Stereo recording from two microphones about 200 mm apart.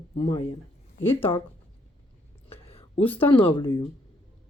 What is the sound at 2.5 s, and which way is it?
Whispering, 30° left (ahead or behind).